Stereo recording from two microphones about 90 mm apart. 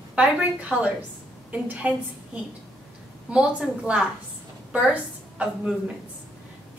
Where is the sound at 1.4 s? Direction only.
15° right (ahead or behind).